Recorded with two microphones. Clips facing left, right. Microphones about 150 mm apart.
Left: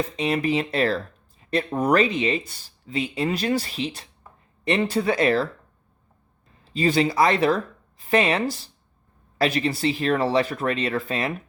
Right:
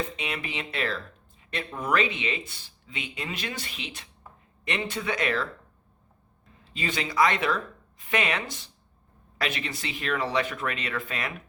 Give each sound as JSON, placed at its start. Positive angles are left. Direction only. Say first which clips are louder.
{"t": 0.2, "sound": "speech", "louder": "left 11 dB", "side_deg": 40}
{"t": 6.7, "sound": "speech", "louder": "left 6 dB", "side_deg": 35}